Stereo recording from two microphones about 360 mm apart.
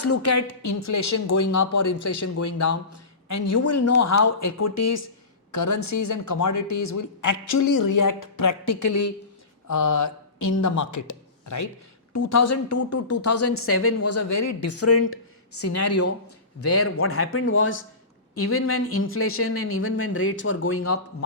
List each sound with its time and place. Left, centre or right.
0.0 s speech: left